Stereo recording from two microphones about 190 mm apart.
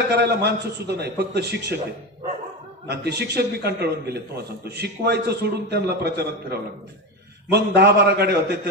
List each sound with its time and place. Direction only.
0.1 s a man's voice: 60° right (ahead or behind)
2.9 s a man's voice: 60° right (ahead or behind)